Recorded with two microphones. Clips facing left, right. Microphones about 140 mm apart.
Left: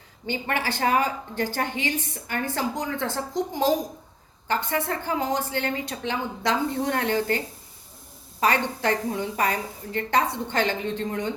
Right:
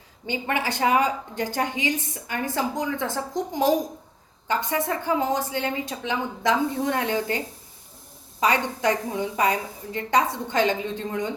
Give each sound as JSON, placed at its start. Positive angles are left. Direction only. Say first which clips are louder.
{"t": 0.3, "sound": "a woman's voice", "louder": "right 1 dB", "side_deg": -20}